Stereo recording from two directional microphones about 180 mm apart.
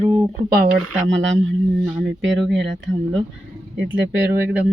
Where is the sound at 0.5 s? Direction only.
60° right (ahead or behind); by 1.5 s 90° right.